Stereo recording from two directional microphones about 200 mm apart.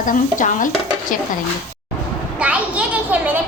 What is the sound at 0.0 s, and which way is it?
Stir, 40° left (ahead or behind).